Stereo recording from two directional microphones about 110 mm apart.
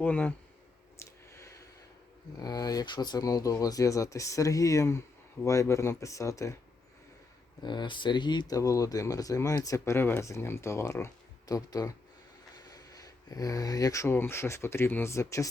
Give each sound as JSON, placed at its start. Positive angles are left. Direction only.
{"t": 0.0, "sound": "speech", "side_deg": 15}
{"t": 0.9, "sound": "a sound", "side_deg": 25}
{"t": 2.4, "sound": "speech", "side_deg": 35}
{"t": 7.6, "sound": "speech", "side_deg": 45}